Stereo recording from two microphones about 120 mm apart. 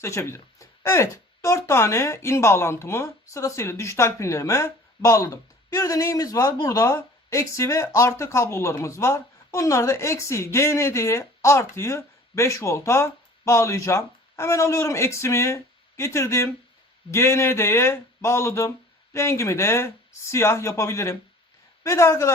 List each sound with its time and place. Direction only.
0.0 s speech: 25° left (ahead or behind)